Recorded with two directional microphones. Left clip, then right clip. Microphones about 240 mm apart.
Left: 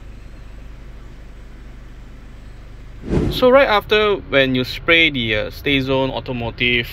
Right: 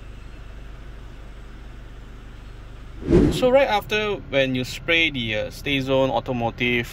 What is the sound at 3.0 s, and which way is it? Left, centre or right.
Speech, centre.